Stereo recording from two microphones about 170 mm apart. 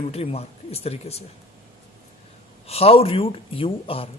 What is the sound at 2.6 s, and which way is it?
Speech, 35° left (ahead or behind).